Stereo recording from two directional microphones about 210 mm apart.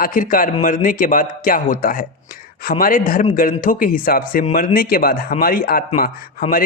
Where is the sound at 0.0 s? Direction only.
40° left (ahead or behind).